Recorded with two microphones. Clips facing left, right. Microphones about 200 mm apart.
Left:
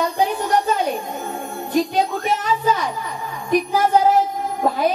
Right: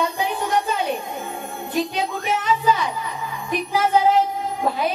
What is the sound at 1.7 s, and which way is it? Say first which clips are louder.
A woman's voice: left 5 dB; 40° left (ahead or behind).